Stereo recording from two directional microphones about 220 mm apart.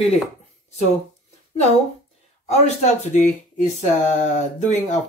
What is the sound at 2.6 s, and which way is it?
Speech, 30° left (ahead or behind).